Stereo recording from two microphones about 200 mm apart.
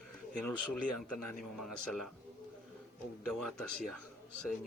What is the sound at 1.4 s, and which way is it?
Speech, centre (ahead or behind).